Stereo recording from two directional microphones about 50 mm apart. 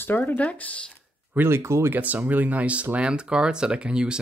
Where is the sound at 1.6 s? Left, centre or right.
Right.